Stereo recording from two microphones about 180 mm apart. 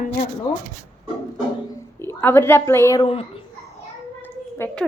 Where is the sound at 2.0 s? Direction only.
15° left (ahead or behind).